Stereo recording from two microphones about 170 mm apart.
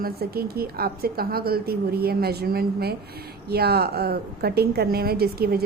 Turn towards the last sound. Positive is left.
turn(degrees=-65)  # may be behind; listen again after turning